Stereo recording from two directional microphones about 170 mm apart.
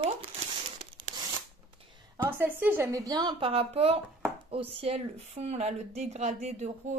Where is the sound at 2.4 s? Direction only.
10° right (ahead or behind).